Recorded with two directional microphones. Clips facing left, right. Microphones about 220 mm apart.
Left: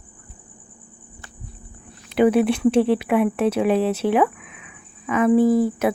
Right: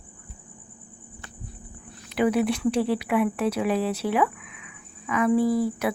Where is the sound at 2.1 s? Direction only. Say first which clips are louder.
Left 6 dB; 25° left (ahead or behind).